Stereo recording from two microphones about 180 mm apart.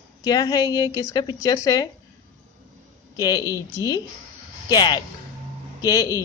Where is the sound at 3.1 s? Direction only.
20° left (ahead or behind).